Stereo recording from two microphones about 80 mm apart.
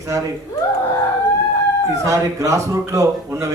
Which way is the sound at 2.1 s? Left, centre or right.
Right.